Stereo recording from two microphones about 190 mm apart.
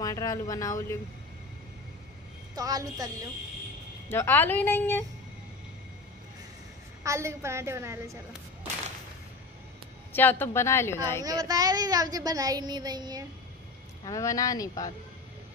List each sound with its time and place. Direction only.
0.0 s speech: 20° left (ahead or behind)
2.5 s speech: 20° right (ahead or behind)
4.1 s speech: 10° left (ahead or behind)
7.0 s a woman's voice: 15° right (ahead or behind)
10.1 s speech: 10° left (ahead or behind)
11.2 s speech: 20° right (ahead or behind)
14.0 s speech: 15° left (ahead or behind)